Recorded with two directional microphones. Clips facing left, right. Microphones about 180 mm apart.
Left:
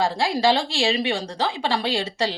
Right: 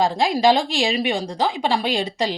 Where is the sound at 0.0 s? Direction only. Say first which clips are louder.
Right 3 dB; 15° right (ahead or behind).